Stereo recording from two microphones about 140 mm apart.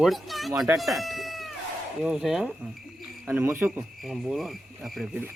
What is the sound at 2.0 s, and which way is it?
Speech, 5° right (ahead or behind).